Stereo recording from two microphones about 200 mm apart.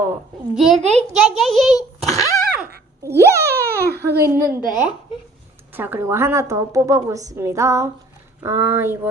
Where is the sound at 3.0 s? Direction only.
15° right (ahead or behind).